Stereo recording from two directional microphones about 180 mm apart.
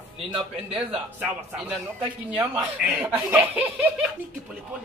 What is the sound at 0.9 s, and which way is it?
Speech, 5° right (ahead or behind).